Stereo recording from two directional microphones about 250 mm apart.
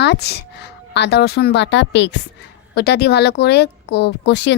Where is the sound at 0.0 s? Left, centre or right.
Left.